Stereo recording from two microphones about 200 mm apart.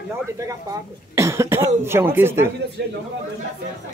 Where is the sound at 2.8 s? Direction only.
60° right (ahead or behind).